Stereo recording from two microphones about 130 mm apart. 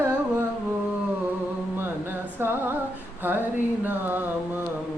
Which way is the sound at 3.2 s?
15° right (ahead or behind).